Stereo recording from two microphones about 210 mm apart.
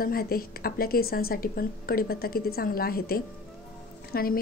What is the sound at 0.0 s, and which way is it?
A woman's voice, 45° left (ahead or behind).